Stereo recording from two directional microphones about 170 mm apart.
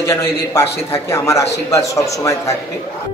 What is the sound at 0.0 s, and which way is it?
Speech, 15° left (ahead or behind).